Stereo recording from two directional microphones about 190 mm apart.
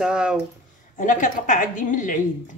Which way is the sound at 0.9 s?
45° left (ahead or behind).